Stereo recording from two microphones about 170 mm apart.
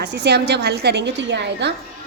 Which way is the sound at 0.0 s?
80° right.